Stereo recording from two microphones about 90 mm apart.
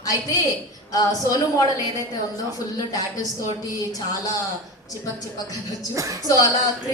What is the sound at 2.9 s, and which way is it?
A woman's voice, 45° left (ahead or behind).